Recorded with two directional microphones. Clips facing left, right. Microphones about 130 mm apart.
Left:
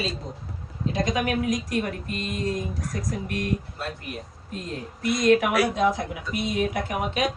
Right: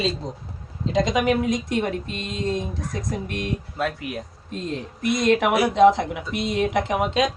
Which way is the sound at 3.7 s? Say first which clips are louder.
Right 8 dB; 90° right.